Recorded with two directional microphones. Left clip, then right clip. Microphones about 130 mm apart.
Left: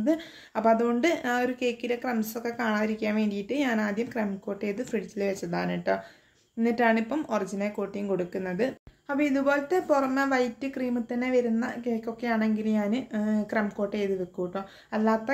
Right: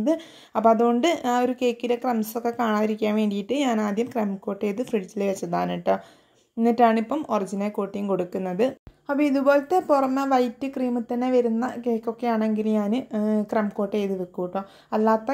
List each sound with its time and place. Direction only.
0.0 s a woman's voice: 40° right (ahead or behind)